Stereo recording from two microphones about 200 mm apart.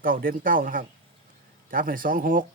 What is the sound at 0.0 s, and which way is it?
Speech, 45° right (ahead or behind).